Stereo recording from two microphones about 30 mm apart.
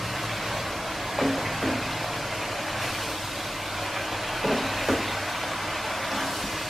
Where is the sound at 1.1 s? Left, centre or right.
Centre.